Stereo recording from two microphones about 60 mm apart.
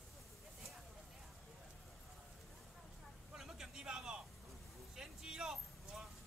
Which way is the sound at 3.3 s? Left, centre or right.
Centre.